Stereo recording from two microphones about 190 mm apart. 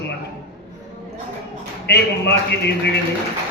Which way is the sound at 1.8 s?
60° left (ahead or behind).